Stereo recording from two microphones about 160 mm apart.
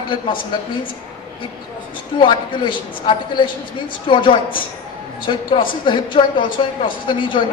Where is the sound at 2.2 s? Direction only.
30° left (ahead or behind).